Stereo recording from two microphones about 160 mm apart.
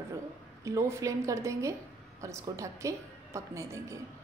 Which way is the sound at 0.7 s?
20° right (ahead or behind).